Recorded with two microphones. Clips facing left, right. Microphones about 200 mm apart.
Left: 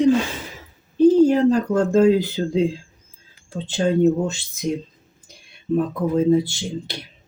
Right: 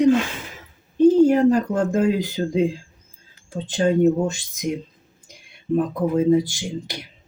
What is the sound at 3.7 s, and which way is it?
Speech, 15° right (ahead or behind).